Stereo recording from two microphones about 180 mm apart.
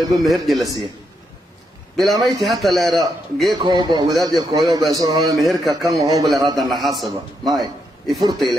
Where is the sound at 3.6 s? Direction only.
25° right (ahead or behind).